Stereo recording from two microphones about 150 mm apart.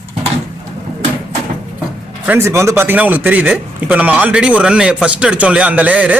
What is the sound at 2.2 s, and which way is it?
A man's voice, 15° right (ahead or behind).